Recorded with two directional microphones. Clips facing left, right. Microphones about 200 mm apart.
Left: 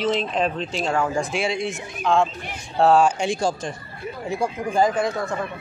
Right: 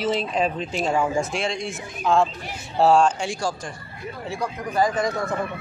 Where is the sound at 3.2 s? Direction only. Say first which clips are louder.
Left 4 dB; 20° left (ahead or behind).